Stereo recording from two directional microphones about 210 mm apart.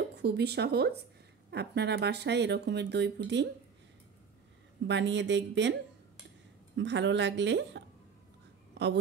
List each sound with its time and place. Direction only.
0.1 s speech: 50° right (ahead or behind)
4.8 s a woman's voice: 55° right (ahead or behind)
6.8 s a woman's voice: 60° right (ahead or behind)